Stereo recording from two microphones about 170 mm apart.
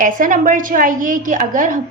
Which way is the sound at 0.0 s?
50° right (ahead or behind).